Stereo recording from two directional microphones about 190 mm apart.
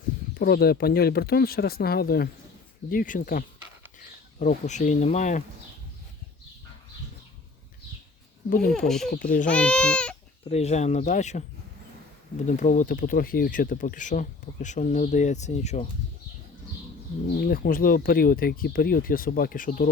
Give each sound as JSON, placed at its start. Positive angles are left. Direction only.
{"t": 0.3, "sound": "speech", "side_deg": 55}
{"t": 8.4, "sound": "speech", "side_deg": 55}
{"t": 8.7, "sound": "speech", "side_deg": 0}
{"t": 10.4, "sound": "speech", "side_deg": 35}
{"t": 12.5, "sound": "speech", "side_deg": 40}
{"t": 17.4, "sound": "speech", "side_deg": 50}